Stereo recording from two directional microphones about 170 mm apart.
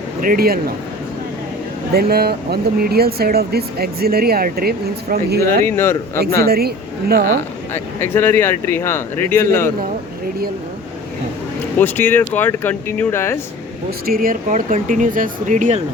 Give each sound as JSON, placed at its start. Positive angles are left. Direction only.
{"t": 0.2, "sound": "speech", "side_deg": -60}
{"t": 1.9, "sound": "speech", "side_deg": -65}
{"t": 5.6, "sound": "speech", "side_deg": 15}
{"t": 6.5, "sound": "speech", "side_deg": -65}
{"t": 7.7, "sound": "speech", "side_deg": 15}
{"t": 11.8, "sound": "speech", "side_deg": 10}
{"t": 14.1, "sound": "speech", "side_deg": -55}